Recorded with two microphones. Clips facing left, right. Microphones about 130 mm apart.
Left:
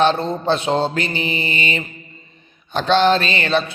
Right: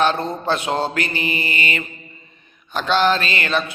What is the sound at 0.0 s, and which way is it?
A man's voice, 25° left (ahead or behind).